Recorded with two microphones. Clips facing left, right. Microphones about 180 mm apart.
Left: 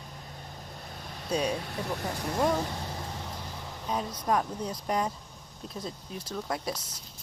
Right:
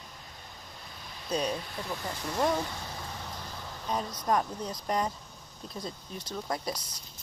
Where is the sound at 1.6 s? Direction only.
60° left (ahead or behind).